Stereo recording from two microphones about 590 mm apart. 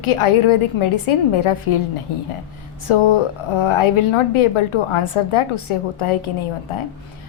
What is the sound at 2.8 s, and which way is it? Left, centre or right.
A woman's voice, left.